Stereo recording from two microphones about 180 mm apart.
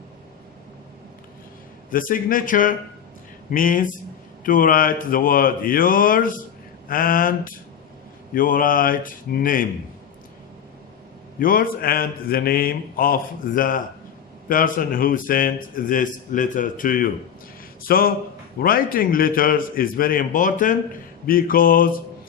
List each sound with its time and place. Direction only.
1.9 s a man's voice: 50° left (ahead or behind)
11.3 s a man's voice: 50° left (ahead or behind)